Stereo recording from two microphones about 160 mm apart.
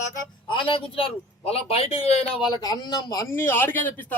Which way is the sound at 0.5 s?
35° left (ahead or behind).